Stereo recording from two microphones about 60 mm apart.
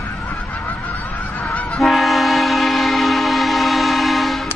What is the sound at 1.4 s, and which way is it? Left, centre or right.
Honk, left.